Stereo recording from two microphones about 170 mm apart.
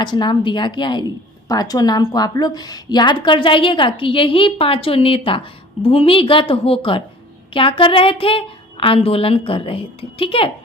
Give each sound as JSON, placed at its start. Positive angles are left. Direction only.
{"t": 0.0, "sound": "a woman's voice", "side_deg": 25}